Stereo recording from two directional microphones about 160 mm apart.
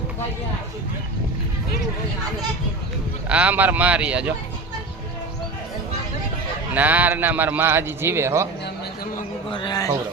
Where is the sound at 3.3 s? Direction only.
10° right (ahead or behind).